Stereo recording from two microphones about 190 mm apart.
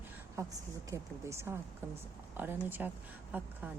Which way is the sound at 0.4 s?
15° right (ahead or behind).